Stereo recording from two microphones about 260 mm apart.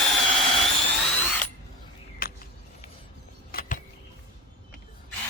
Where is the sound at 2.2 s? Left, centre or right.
Left.